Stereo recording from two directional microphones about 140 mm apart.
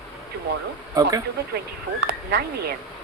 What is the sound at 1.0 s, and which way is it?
Speech, 30° right (ahead or behind).